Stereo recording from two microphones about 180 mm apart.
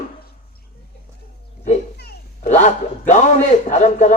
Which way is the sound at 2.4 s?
40° left (ahead or behind).